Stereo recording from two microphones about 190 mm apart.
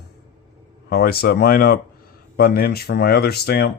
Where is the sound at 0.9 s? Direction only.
55° left (ahead or behind).